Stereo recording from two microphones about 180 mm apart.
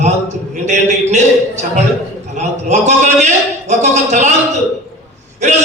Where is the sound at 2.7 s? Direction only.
40° right (ahead or behind).